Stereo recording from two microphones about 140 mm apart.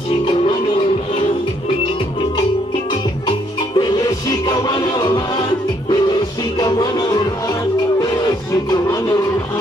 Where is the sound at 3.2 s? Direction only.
30° left (ahead or behind).